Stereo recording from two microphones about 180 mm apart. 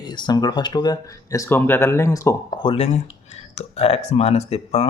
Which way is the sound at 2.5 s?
30° left (ahead or behind).